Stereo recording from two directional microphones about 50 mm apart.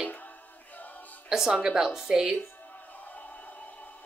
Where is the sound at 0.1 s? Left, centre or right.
Left.